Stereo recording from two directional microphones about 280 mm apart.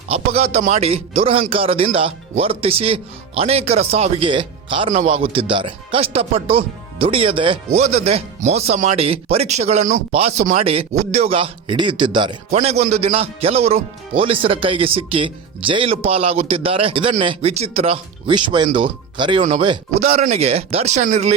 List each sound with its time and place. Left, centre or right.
0.1 s a man's voice: right